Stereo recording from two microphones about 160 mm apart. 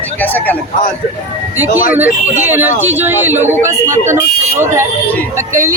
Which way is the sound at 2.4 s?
10° right (ahead or behind).